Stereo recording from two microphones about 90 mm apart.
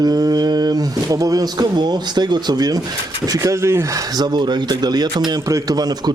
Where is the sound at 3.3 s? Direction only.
30° right (ahead or behind); by 5.4 s 50° right (ahead or behind).